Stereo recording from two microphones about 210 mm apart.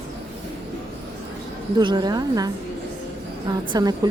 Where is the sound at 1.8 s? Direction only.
20° right (ahead or behind).